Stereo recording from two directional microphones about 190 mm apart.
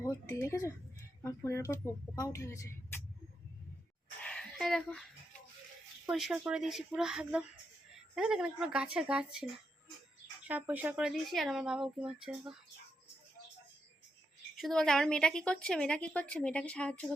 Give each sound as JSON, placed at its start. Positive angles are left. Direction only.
{"t": 0.0, "sound": "a woman's voice", "side_deg": 15}
{"t": 4.2, "sound": "a sound", "side_deg": 5}
{"t": 6.1, "sound": "a woman's voice", "side_deg": -5}
{"t": 14.5, "sound": "a woman's voice", "side_deg": 0}